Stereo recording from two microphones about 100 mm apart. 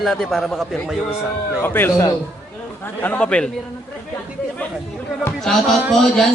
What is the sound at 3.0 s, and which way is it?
Speech, 15° left (ahead or behind).